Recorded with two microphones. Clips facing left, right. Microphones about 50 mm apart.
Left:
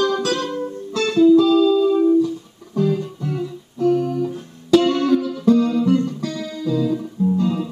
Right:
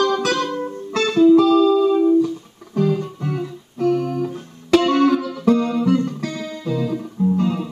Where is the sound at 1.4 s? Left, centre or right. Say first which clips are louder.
Right 1 dB; right.